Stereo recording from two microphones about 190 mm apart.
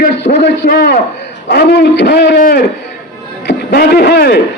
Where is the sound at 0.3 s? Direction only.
35° left (ahead or behind).